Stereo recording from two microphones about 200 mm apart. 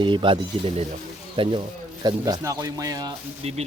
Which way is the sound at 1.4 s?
25° right (ahead or behind).